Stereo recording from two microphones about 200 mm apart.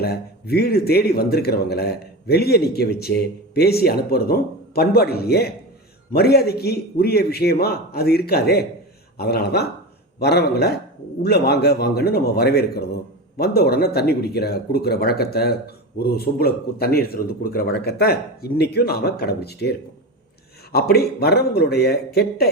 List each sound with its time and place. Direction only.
0.0 s speech: 50° left (ahead or behind)
20.7 s speech: 50° left (ahead or behind)